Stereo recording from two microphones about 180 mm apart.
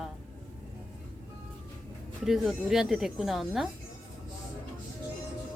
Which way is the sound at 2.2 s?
Centre (ahead or behind).